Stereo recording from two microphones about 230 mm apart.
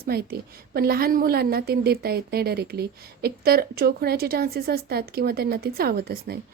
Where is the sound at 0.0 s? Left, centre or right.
Right.